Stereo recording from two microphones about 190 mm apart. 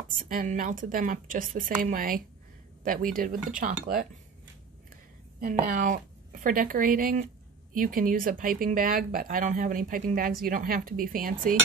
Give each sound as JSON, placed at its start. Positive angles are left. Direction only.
{"t": 0.3, "sound": "speech", "side_deg": -45}
{"t": 5.4, "sound": "a woman's voice", "side_deg": -45}